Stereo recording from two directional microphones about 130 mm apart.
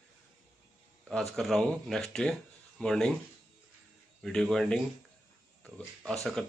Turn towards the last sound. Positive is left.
turn(degrees=5)  # may be behind; listen again after turning